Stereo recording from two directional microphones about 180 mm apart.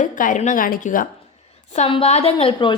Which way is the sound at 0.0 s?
45° left (ahead or behind).